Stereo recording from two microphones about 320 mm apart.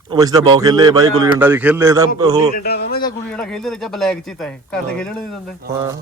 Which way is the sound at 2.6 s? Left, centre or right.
Left.